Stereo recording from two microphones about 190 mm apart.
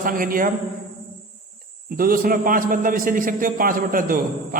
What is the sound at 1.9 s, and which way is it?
A man's voice, 50° right (ahead or behind).